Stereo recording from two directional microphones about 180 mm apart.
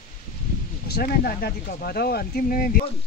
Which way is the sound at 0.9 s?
60° left (ahead or behind).